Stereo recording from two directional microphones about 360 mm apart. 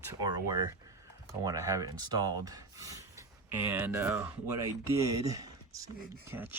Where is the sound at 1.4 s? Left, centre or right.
Centre.